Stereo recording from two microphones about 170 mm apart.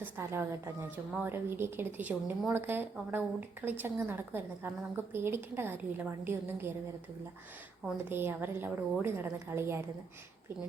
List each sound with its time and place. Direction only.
0.0 s a woman's voice: 15° right (ahead or behind)
8.1 s a woman's voice: 15° right (ahead or behind)